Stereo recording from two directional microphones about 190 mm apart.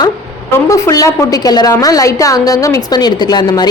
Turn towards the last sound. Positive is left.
turn(degrees=20)  # may be behind; listen again after turning